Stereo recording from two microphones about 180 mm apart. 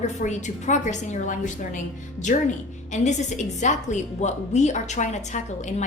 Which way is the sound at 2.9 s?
40° left (ahead or behind).